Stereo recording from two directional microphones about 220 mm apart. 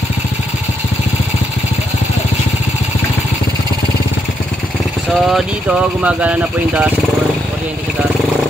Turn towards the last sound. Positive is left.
turn(degrees=-5)  # may be behind; listen again after turning